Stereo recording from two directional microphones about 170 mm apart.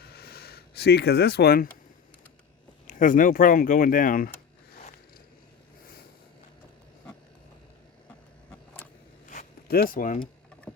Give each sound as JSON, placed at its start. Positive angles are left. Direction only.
{"t": 0.1, "sound": "a sound", "side_deg": 65}
{"t": 2.8, "sound": "speech", "side_deg": 50}
{"t": 9.6, "sound": "speech", "side_deg": 60}